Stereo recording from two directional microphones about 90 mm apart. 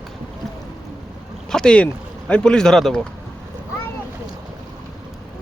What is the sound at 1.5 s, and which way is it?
Speech, 10° left (ahead or behind).